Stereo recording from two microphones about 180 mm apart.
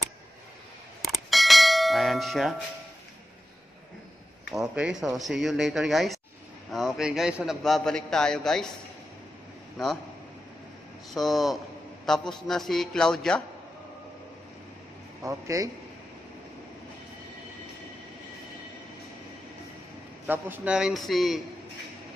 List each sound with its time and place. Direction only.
1.0 s bell: centre (ahead or behind)
4.5 s a man's voice: 5° right (ahead or behind)
11.1 s a man's voice: centre (ahead or behind)
15.2 s a man's voice: 20° right (ahead or behind)
20.2 s a man's voice: 10° right (ahead or behind)